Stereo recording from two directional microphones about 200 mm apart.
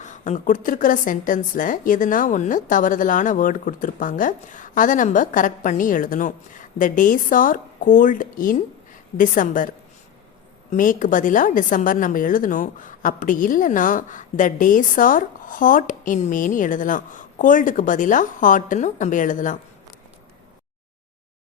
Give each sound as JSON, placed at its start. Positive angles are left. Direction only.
{"t": 0.0, "sound": "a woman's voice", "side_deg": 40}